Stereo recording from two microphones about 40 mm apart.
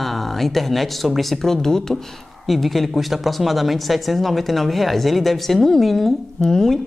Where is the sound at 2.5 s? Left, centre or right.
Centre.